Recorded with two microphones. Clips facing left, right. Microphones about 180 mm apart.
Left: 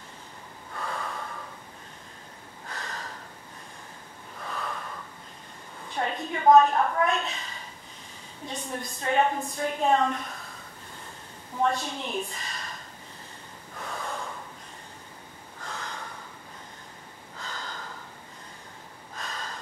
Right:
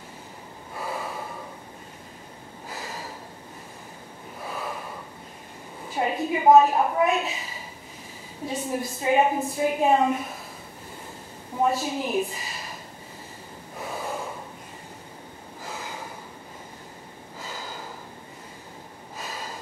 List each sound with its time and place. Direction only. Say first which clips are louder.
0.7 s gasp: right 2 dB; 10° right (ahead or behind)
2.7 s snort: right 2 dB; 5° right (ahead or behind)
4.4 s gasp: right 2 dB; 10° right (ahead or behind)
5.9 s a woman's voice: right 5 dB; 10° right (ahead or behind)
11.6 s speech: right 3 dB; 5° right (ahead or behind)
13.7 s gasp: right 3 dB; 10° right (ahead or behind)
15.6 s gasp: right 2 dB; 5° right (ahead or behind)
17.4 s gasp: right 2 dB; 5° right (ahead or behind)
19.1 s gasp: right 2 dB; 5° right (ahead or behind)